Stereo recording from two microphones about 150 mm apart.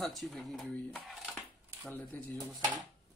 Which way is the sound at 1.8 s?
Centre (ahead or behind).